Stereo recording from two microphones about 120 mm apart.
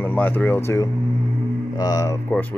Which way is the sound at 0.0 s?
15° left (ahead or behind).